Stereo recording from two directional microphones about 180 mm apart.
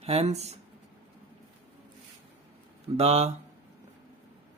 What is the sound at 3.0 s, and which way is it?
Speech, 35° right (ahead or behind).